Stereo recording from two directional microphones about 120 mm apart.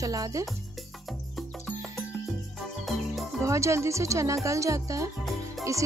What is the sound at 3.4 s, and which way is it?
Speech, 25° right (ahead or behind).